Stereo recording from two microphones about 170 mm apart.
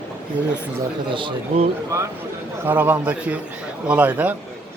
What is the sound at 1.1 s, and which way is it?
Speech, 30° right (ahead or behind).